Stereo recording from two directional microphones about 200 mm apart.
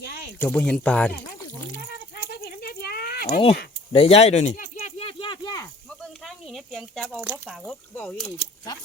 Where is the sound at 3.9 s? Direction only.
30° left (ahead or behind).